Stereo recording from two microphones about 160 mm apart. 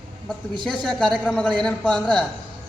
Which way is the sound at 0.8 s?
5° left (ahead or behind).